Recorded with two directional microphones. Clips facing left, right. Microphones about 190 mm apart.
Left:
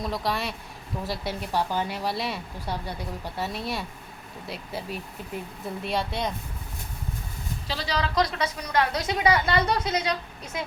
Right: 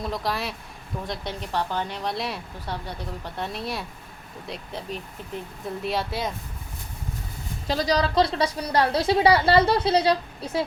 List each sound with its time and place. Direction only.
0.0 s a woman's voice: centre (ahead or behind)
2.6 s a woman's voice: 10° left (ahead or behind)
7.7 s a woman's voice: 40° right (ahead or behind)